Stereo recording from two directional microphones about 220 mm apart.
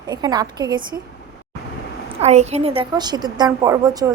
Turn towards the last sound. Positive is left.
turn(degrees=-15)  # may be behind; listen again after turning